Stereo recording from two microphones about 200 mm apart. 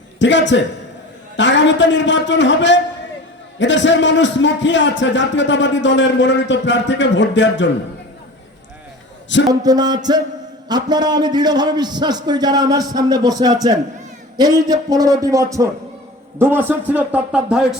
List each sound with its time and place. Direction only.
0.2 s a man's voice: 65° left (ahead or behind)
9.5 s a man's voice: 20° right (ahead or behind); by 17.7 s 5° right (ahead or behind)